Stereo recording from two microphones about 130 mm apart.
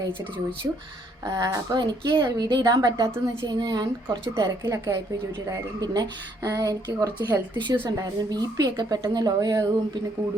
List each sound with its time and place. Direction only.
1.3 s a woman's voice: 25° right (ahead or behind)